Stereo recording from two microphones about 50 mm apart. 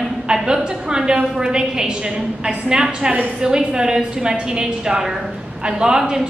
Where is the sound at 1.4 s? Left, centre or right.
Centre.